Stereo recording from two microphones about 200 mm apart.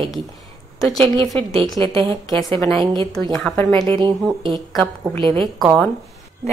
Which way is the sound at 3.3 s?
5° left (ahead or behind).